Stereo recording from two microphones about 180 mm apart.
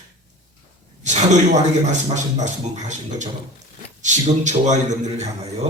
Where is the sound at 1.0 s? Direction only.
40° right (ahead or behind).